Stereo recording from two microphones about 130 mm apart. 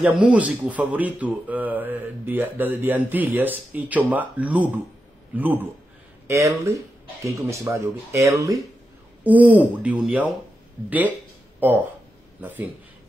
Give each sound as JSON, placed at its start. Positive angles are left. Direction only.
{"t": 0.0, "sound": "speech", "side_deg": -5}
{"t": 9.2, "sound": "speech", "side_deg": -10}